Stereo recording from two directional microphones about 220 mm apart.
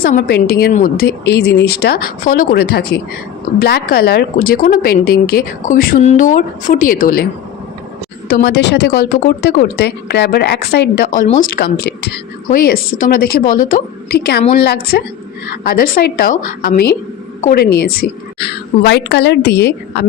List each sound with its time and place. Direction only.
0.0 s a woman's voice: 40° left (ahead or behind)
8.3 s a woman's voice: 50° left (ahead or behind)